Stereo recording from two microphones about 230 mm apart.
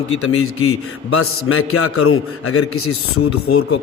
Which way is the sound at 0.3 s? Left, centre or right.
Left.